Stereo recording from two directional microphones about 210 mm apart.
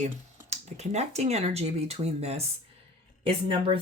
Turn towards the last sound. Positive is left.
turn(degrees=-25)  # may be behind; listen again after turning